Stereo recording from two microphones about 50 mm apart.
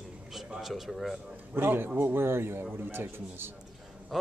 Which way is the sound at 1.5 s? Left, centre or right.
Right.